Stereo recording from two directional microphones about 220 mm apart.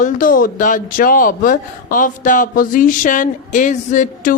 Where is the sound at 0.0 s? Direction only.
40° left (ahead or behind).